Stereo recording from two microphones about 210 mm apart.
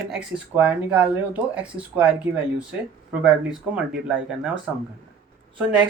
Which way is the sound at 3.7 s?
5° right (ahead or behind).